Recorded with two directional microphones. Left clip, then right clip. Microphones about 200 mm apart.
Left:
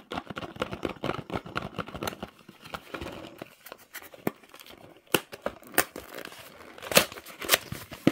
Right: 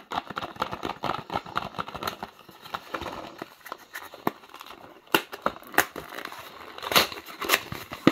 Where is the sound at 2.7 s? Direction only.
45° left (ahead or behind).